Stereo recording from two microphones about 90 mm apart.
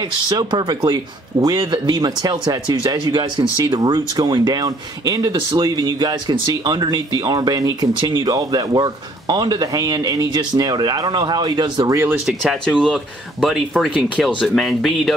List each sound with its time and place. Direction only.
0.3 s speech: 55° right (ahead or behind)
11.9 s speech: 30° right (ahead or behind)
12.3 s speech: 5° right (ahead or behind)
14.1 s speech: 10° left (ahead or behind)